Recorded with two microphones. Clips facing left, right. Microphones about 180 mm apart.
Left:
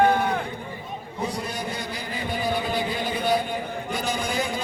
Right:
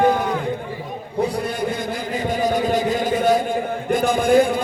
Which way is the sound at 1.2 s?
60° right (ahead or behind).